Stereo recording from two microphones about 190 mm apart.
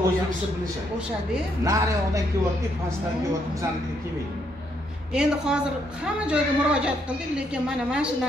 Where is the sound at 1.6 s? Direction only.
15° right (ahead or behind).